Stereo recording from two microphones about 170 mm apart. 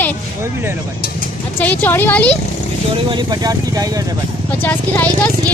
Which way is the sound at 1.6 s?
10° left (ahead or behind).